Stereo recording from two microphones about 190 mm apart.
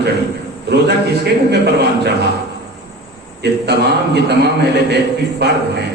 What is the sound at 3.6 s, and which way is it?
A man's voice, 60° right (ahead or behind).